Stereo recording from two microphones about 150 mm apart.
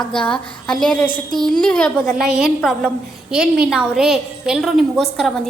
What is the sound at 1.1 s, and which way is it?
Speech, 30° right (ahead or behind).